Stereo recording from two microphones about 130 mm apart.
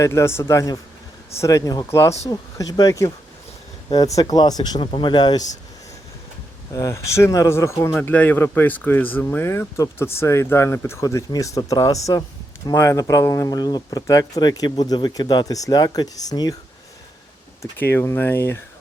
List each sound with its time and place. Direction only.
0.0 s speech: 20° left (ahead or behind)
6.7 s speech: 25° left (ahead or behind)
17.6 s speech: 15° left (ahead or behind)